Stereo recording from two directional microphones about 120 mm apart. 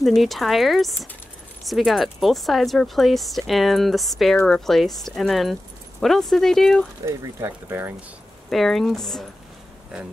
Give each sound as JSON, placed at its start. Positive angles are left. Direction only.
{"t": 0.0, "sound": "speech", "side_deg": 0}
{"t": 7.1, "sound": "speech", "side_deg": -25}
{"t": 8.5, "sound": "speech", "side_deg": 5}